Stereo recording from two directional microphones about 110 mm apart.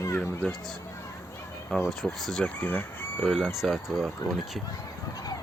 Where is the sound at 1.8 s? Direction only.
5° left (ahead or behind).